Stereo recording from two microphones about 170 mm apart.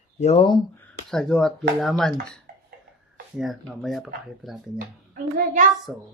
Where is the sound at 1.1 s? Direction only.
5° left (ahead or behind).